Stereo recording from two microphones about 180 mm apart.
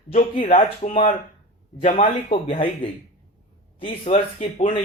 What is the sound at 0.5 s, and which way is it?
Speech, 35° left (ahead or behind).